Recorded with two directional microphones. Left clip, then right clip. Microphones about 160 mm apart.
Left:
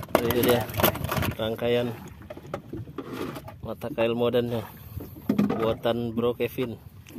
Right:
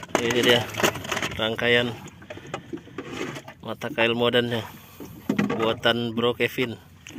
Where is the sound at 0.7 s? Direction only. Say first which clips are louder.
Right 1 dB; 25° left (ahead or behind).